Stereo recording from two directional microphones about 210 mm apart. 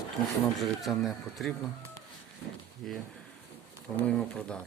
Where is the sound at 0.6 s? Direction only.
Centre (ahead or behind).